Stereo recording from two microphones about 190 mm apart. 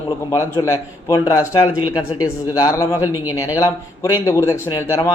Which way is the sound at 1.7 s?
90° left.